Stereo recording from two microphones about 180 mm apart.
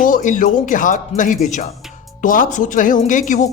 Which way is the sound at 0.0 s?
45° left (ahead or behind).